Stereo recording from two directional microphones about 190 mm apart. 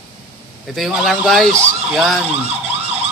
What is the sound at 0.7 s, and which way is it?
Speech, centre (ahead or behind).